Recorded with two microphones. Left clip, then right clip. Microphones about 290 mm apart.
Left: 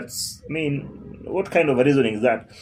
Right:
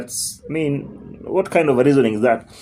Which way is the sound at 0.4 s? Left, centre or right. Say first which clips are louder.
Right 4 dB; right.